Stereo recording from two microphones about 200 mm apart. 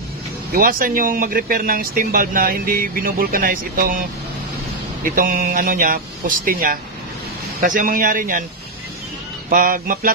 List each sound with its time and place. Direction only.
0.5 s speech: 45° right (ahead or behind)
5.0 s speech: 45° right (ahead or behind)
9.5 s speech: 45° right (ahead or behind)